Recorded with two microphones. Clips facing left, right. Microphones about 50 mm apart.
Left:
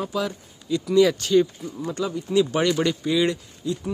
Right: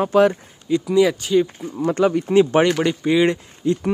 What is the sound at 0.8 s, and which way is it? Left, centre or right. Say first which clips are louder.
Speech: even; centre.